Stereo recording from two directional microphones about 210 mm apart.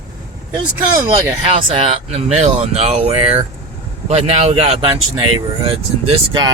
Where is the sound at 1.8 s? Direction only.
25° right (ahead or behind).